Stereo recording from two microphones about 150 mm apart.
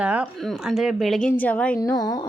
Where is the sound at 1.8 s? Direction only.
25° left (ahead or behind).